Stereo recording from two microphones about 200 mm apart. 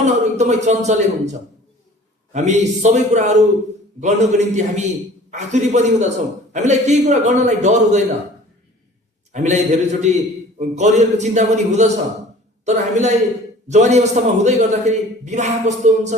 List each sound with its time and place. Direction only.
0.0 s a man's voice: 35° right (ahead or behind)
9.3 s a man's voice: 35° right (ahead or behind)